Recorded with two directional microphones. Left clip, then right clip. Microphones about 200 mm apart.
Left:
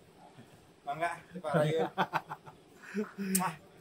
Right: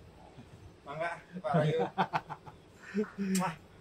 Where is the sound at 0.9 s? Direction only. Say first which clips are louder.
Even; 40° left (ahead or behind).